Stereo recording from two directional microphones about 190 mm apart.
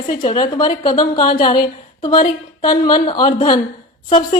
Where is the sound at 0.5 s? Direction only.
25° left (ahead or behind).